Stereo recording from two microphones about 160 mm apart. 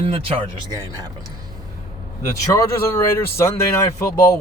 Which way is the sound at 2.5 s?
15° left (ahead or behind).